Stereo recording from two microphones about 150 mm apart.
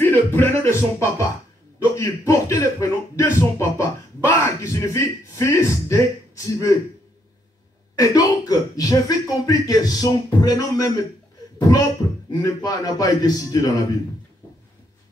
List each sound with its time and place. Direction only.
0.0 s speech: 15° left (ahead or behind)
8.0 s speech: 25° left (ahead or behind)
11.5 s a sound: 25° left (ahead or behind)
12.3 s speech: 25° left (ahead or behind)